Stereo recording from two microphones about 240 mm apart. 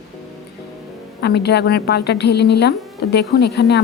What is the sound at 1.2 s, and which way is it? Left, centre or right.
Speech, left.